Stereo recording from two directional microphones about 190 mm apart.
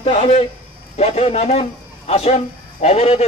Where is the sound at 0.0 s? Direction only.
35° left (ahead or behind).